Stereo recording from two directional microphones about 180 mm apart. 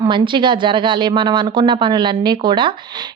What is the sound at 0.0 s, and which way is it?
Speech, 25° right (ahead or behind).